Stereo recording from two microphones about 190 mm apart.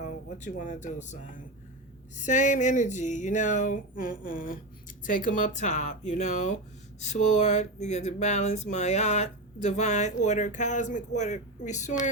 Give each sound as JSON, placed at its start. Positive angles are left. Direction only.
{"t": 0.0, "sound": "speech", "side_deg": 40}